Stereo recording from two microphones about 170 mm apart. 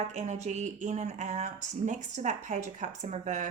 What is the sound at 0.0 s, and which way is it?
Speech, 45° right (ahead or behind).